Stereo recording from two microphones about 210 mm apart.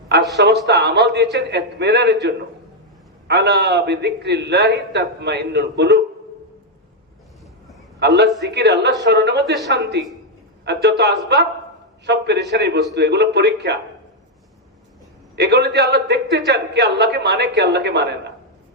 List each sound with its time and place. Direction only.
0.3 s a man's voice: 55° right (ahead or behind)
3.2 s a man's voice: 50° right (ahead or behind)
7.9 s a man's voice: 55° right (ahead or behind)
15.4 s a man's voice: 50° right (ahead or behind)